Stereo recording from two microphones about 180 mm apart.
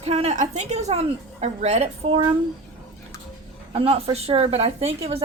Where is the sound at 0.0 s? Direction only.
35° right (ahead or behind).